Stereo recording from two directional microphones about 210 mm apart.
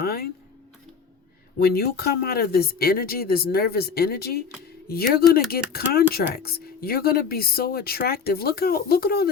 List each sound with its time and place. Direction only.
0.0 s speech: 45° left (ahead or behind)
1.5 s speech: 45° left (ahead or behind)